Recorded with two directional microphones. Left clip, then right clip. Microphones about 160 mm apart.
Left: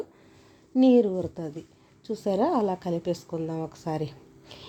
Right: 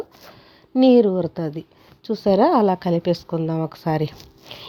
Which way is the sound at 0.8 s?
30° right (ahead or behind).